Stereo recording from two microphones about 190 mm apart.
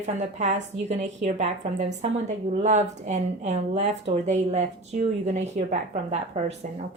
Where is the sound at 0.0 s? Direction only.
40° right (ahead or behind).